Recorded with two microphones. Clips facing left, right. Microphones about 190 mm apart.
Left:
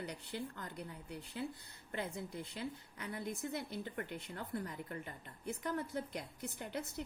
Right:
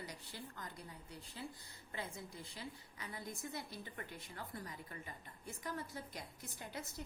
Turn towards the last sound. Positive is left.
turn(degrees=65)  # may be behind; listen again after turning